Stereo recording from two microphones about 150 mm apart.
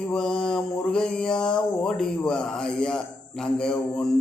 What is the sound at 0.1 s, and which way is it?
Mantra, 5° left (ahead or behind).